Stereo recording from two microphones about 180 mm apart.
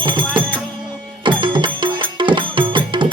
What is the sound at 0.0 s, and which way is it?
Music, 25° right (ahead or behind).